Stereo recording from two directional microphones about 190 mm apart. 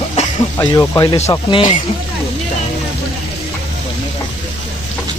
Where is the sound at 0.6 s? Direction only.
20° left (ahead or behind).